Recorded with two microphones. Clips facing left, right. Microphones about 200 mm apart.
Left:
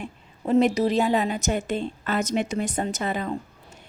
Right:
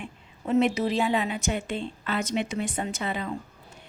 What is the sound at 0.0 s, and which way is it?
A woman's voice, 35° left (ahead or behind).